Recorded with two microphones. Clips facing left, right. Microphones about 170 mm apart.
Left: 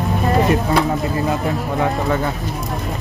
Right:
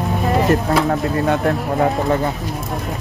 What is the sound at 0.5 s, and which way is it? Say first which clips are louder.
Speech: right 1 dB; centre (ahead or behind).